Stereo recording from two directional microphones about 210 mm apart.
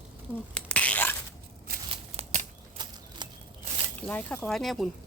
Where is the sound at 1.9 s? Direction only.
30° right (ahead or behind).